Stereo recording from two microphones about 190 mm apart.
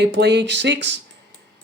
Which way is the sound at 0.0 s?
65° right (ahead or behind).